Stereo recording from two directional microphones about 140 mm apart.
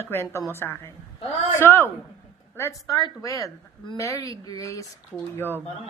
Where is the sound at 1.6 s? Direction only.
15° left (ahead or behind).